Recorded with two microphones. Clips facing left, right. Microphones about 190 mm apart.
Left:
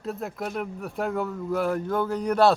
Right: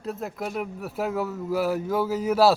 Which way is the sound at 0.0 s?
Centre (ahead or behind).